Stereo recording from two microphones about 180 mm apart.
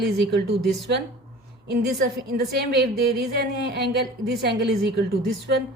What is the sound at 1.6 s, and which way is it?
A woman's voice, 60° right (ahead or behind).